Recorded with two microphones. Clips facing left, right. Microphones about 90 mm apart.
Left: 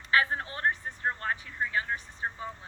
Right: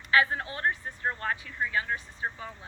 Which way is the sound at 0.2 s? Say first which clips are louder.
Right 2 dB; 30° left (ahead or behind).